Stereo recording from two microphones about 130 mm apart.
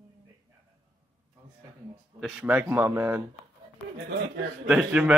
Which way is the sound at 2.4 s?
15° right (ahead or behind).